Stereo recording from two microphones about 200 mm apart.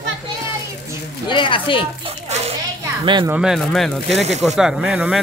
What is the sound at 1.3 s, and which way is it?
Speech, 25° left (ahead or behind).